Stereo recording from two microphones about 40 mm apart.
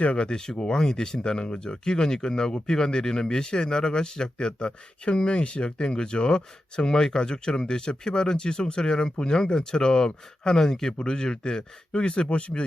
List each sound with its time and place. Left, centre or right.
0.0 s speech: left
0.3 s speech: centre